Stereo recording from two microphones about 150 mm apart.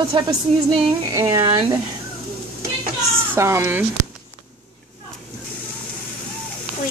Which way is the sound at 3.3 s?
20° right (ahead or behind).